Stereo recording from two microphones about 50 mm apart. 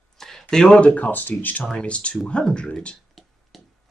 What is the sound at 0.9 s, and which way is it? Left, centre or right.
Speech, left.